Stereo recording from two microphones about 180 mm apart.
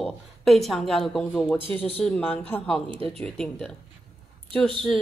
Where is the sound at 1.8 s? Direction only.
35° left (ahead or behind).